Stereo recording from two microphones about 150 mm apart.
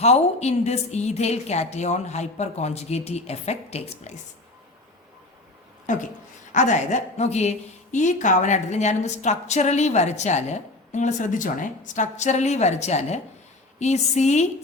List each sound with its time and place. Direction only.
0.0 s a woman's voice: 45° left (ahead or behind)
5.9 s a woman's voice: 55° left (ahead or behind)